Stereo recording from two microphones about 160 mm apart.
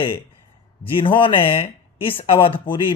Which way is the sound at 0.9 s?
30° left (ahead or behind).